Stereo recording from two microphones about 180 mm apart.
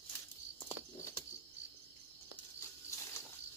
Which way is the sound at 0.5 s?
15° left (ahead or behind).